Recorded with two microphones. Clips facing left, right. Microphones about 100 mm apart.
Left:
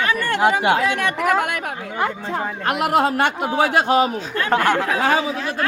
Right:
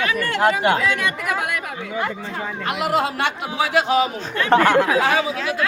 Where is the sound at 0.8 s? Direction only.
65° left (ahead or behind); by 4.5 s 45° left (ahead or behind).